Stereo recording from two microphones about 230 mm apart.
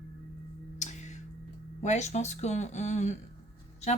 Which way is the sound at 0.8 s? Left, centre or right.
Left.